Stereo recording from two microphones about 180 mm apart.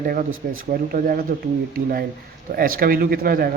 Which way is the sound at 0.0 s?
50° right (ahead or behind).